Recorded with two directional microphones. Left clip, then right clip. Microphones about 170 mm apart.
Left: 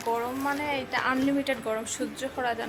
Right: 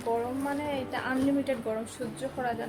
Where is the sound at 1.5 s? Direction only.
5° right (ahead or behind).